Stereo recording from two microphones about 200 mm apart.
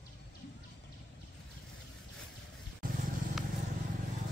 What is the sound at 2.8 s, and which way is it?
Vehicle, 45° right (ahead or behind).